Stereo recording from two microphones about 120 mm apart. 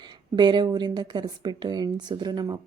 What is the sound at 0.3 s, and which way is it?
Speech, 40° right (ahead or behind).